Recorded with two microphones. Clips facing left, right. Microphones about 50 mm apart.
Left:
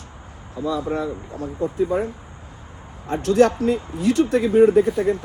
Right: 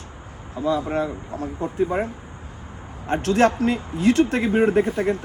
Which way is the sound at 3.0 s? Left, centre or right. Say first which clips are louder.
Left 2 dB; right.